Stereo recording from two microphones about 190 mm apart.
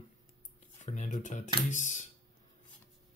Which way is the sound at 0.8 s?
40° left (ahead or behind).